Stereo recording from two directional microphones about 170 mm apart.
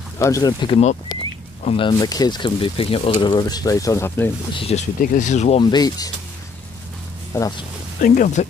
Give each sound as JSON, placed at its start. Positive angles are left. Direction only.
{"t": 0.2, "sound": "speech", "side_deg": 20}
{"t": 4.6, "sound": "speech", "side_deg": 35}
{"t": 5.0, "sound": "speech", "side_deg": 50}
{"t": 5.6, "sound": "speech", "side_deg": 25}
{"t": 7.3, "sound": "speech", "side_deg": 20}
{"t": 8.0, "sound": "speech", "side_deg": 50}